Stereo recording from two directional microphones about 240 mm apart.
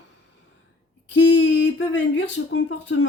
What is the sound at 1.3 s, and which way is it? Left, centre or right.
Speech, left.